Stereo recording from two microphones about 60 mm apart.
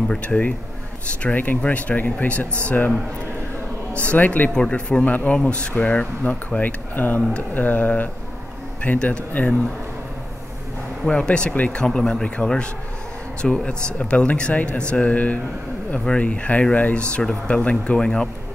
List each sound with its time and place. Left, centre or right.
0.1 s speech: left
4.0 s speech: left
4.6 s speech: centre
11.1 s speech: centre
11.8 s speech: centre